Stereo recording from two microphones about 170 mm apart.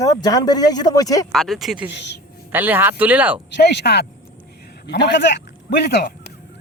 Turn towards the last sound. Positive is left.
turn(degrees=75)  # may be behind; listen again after turning